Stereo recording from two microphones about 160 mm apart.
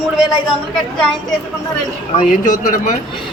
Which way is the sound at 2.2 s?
55° left (ahead or behind).